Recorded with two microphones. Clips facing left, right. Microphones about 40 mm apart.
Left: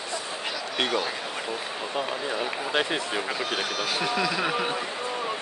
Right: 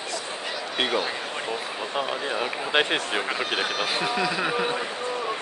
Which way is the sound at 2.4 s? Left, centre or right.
Right.